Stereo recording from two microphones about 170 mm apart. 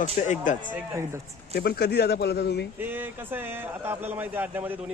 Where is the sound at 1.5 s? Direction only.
70° left (ahead or behind).